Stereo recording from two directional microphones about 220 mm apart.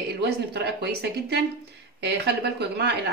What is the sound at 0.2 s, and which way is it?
Speech, 50° right (ahead or behind).